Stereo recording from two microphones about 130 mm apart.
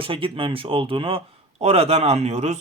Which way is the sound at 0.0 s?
45° right (ahead or behind).